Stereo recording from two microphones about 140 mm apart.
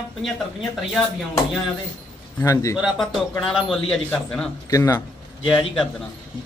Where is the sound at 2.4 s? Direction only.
20° left (ahead or behind).